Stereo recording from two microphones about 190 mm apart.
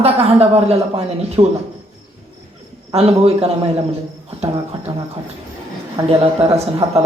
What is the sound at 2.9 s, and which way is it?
Speech, 30° right (ahead or behind).